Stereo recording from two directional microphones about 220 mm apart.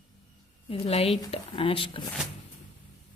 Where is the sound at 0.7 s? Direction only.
25° left (ahead or behind).